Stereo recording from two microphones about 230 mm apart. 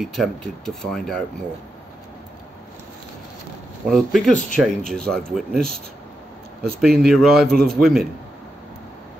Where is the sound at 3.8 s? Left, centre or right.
Centre.